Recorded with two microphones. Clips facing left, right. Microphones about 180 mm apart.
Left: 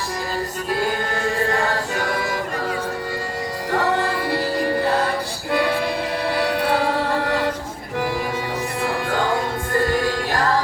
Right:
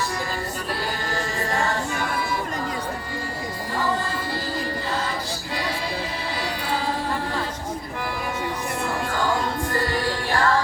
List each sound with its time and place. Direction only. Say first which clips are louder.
1.6 s music: left 3 dB; 70° left (ahead or behind); by 2.4 s 85° left
3.7 s music: left 5 dB; 70° left (ahead or behind)
9.9 s music: left 3 dB; 40° left (ahead or behind)